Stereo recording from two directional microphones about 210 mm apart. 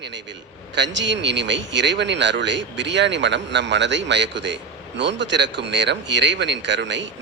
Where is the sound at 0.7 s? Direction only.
55° right (ahead or behind).